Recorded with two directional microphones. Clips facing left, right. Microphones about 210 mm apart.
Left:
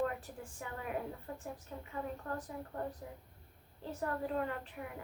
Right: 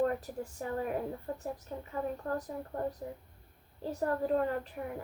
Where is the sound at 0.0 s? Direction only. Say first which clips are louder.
Right 6 dB; 40° right (ahead or behind).